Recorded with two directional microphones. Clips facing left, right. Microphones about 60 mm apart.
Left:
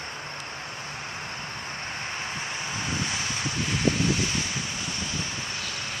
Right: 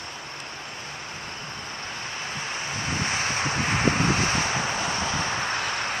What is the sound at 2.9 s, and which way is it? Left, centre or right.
Vehicle, right.